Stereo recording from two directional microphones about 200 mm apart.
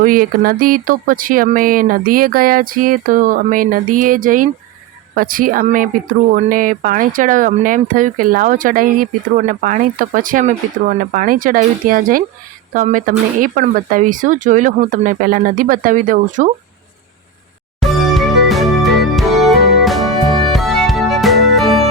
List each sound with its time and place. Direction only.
0.0 s speech: 45° right (ahead or behind)
17.7 s music: centre (ahead or behind)